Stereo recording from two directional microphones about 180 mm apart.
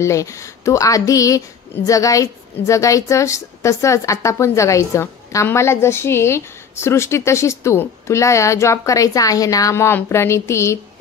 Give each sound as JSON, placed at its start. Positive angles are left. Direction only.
{"t": 0.0, "sound": "a woman's voice", "side_deg": 15}